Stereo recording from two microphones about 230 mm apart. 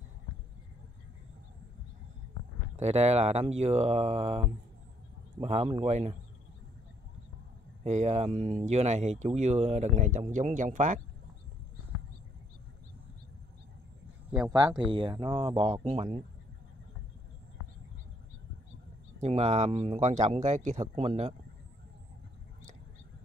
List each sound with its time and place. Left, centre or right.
2.7 s speech: right
5.5 s speech: right
7.8 s speech: right
14.3 s speech: centre
19.2 s speech: right